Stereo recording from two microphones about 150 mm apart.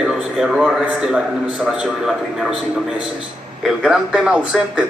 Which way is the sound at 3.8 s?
5° right (ahead or behind).